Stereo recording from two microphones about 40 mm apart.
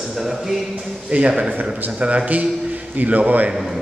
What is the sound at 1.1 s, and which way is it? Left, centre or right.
A man's voice, right.